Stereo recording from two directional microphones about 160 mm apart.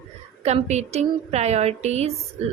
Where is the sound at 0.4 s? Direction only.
45° right (ahead or behind).